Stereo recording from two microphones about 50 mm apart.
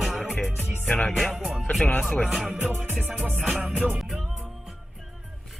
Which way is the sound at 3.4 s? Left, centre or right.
Centre.